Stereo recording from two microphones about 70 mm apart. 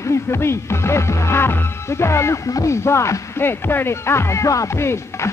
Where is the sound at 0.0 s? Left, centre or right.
Left.